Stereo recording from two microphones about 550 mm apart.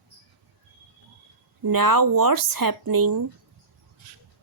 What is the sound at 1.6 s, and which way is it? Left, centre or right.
Speech, right.